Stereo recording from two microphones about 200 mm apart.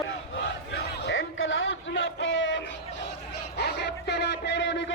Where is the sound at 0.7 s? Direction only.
65° left (ahead or behind).